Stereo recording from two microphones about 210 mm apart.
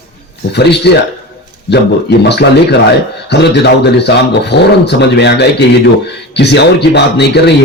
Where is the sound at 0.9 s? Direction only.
55° left (ahead or behind).